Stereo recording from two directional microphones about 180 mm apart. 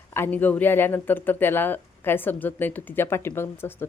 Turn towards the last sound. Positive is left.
turn(degrees=15)  # may be behind; listen again after turning